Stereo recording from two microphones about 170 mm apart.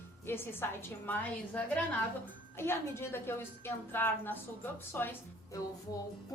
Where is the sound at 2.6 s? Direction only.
15° left (ahead or behind).